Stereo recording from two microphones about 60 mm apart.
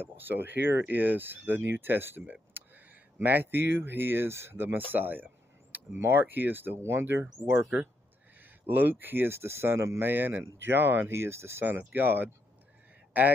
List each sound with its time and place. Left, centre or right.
0.0 s speech: right
8.4 s speech: right
10.0 s speech: right